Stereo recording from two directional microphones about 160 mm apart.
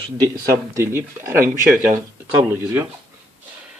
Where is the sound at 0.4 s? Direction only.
20° right (ahead or behind).